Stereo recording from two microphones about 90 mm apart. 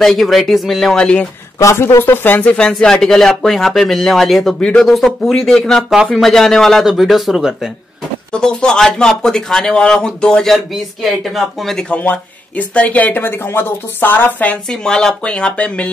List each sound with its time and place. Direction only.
0.0 s speech: centre (ahead or behind)
1.6 s speech: 35° left (ahead or behind)
2.5 s speech: 10° left (ahead or behind)
8.3 s speech: 10° left (ahead or behind)
11.9 s speech: 15° left (ahead or behind)
14.7 s speech: 5° left (ahead or behind)